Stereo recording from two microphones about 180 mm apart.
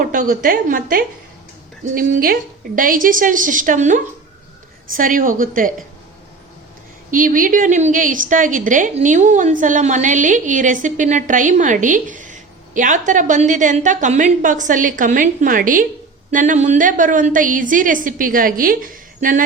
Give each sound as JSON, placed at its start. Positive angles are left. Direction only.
{"t": 0.0, "sound": "a woman's voice", "side_deg": -45}
{"t": 7.1, "sound": "a woman's voice", "side_deg": -50}